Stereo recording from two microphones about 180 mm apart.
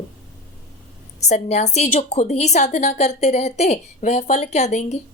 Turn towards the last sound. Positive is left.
turn(degrees=40)  # may be behind; listen again after turning